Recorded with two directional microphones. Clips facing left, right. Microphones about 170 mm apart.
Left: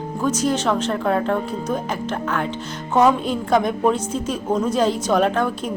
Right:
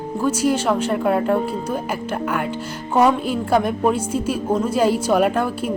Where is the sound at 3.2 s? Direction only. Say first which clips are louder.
Even; 5° right (ahead or behind).